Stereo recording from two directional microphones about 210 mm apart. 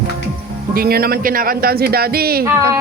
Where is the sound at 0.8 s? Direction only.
45° right (ahead or behind).